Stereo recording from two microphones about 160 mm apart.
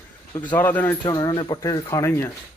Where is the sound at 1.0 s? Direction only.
25° left (ahead or behind).